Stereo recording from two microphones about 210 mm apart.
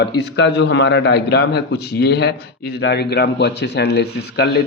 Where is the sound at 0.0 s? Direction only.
55° left (ahead or behind).